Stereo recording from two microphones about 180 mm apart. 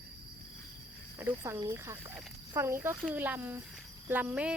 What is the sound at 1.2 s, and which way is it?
Speech, 15° right (ahead or behind).